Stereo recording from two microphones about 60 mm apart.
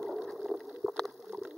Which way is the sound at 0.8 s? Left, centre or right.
Centre.